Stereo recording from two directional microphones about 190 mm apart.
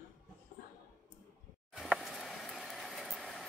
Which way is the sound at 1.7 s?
Centre (ahead or behind).